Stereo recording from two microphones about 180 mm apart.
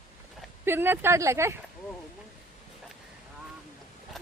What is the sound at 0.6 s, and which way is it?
Speech, 10° right (ahead or behind).